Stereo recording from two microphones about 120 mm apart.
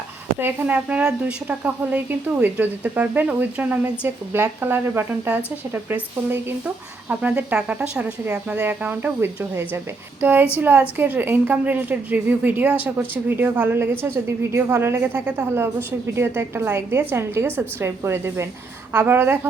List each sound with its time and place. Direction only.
0.3 s a woman's voice: 15° right (ahead or behind)